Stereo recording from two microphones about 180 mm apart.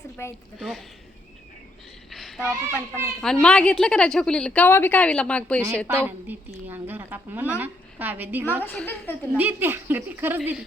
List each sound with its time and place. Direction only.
0.2 s a woman's voice: 15° left (ahead or behind)
0.6 s a woman's voice: centre (ahead or behind)
2.0 s a sound: centre (ahead or behind)
3.2 s a woman's voice: 5° left (ahead or behind)
5.9 s speech: 10° right (ahead or behind)
8.6 s a woman's voice: 10° left (ahead or behind)
9.4 s speech: 10° right (ahead or behind)